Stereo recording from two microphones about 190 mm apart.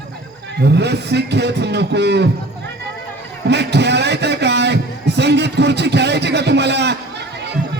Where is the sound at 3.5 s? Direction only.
65° right (ahead or behind).